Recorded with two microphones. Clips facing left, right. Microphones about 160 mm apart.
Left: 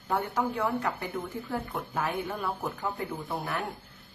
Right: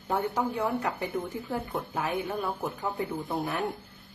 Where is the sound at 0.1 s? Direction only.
10° right (ahead or behind).